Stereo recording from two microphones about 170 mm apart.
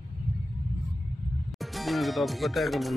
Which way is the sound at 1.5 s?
Centre (ahead or behind).